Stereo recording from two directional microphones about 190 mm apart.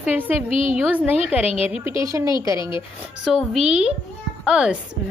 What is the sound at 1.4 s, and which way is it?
Speech, 30° left (ahead or behind).